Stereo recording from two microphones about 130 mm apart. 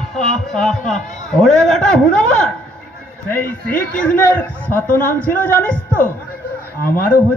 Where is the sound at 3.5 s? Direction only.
10° left (ahead or behind).